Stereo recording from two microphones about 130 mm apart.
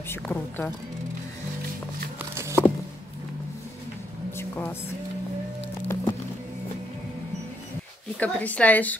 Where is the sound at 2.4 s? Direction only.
20° right (ahead or behind).